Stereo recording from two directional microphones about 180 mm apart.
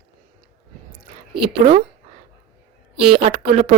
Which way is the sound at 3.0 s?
30° right (ahead or behind).